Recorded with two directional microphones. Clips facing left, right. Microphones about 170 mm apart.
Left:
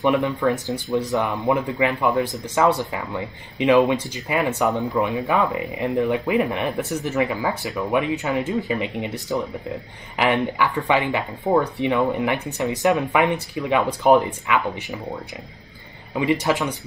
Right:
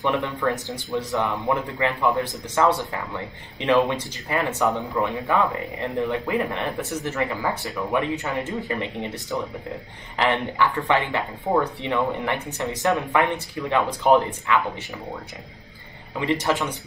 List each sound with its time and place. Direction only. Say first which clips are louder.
0.0 s speech: left 4 dB; 15° left (ahead or behind)
10.1 s speech: left 2 dB; 10° left (ahead or behind)
16.2 s speech: left 3 dB; 10° left (ahead or behind)